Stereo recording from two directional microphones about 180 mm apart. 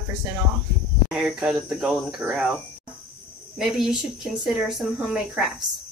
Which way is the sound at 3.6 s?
5° right (ahead or behind).